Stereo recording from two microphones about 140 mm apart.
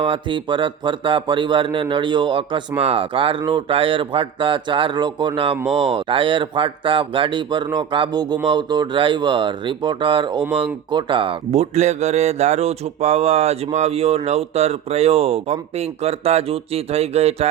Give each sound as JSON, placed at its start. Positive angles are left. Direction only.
{"t": 0.0, "sound": "speech", "side_deg": -35}
{"t": 11.5, "sound": "speech", "side_deg": -50}